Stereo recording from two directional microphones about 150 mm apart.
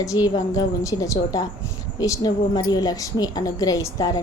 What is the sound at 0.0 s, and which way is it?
A woman's voice, 25° left (ahead or behind).